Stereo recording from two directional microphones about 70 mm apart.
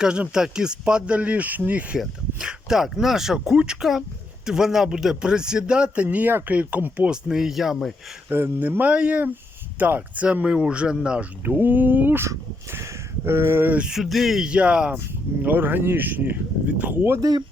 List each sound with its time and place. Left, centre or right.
0.0 s speech: centre
2.0 s speech: centre
8.3 s speech: right; by 11.3 s centre
11.4 s speech: right
12.7 s speech: right
13.7 s speech: centre
15.4 s speech: right
17.2 s speech: right